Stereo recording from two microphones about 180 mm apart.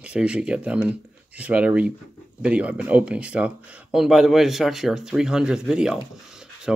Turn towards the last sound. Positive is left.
turn(degrees=-5)  # may be behind; listen again after turning